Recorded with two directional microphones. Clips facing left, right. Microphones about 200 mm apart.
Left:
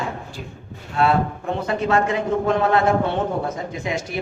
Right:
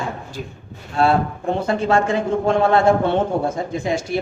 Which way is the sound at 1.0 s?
30° right (ahead or behind).